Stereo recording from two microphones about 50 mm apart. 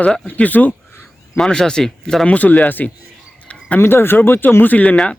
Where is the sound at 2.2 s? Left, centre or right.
Left.